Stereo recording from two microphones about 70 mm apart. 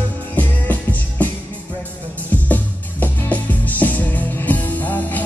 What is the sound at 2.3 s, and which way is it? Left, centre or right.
Music, left.